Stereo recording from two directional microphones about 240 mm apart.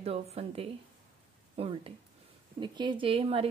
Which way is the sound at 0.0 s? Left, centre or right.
Right.